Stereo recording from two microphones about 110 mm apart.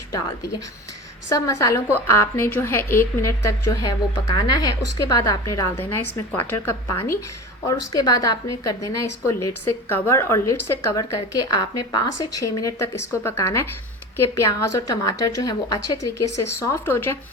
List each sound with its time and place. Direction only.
0.1 s a woman's voice: 30° left (ahead or behind)
7.7 s a woman's voice: 35° left (ahead or behind)